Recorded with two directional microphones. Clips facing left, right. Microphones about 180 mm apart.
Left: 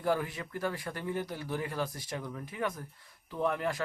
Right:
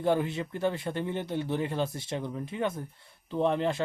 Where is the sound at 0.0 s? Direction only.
25° right (ahead or behind).